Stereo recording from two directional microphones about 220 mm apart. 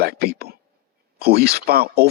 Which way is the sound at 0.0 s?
45° right (ahead or behind).